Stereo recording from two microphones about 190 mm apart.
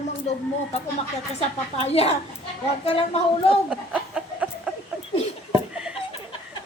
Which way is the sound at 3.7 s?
5° right (ahead or behind).